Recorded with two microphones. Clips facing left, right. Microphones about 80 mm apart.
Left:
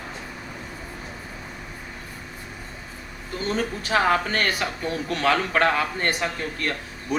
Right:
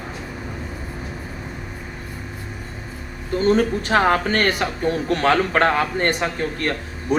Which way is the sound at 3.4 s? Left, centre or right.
Right.